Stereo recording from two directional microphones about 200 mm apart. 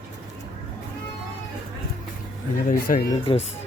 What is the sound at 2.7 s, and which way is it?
Speech, 45° left (ahead or behind).